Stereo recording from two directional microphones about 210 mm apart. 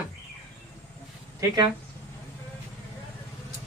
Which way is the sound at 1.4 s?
20° right (ahead or behind).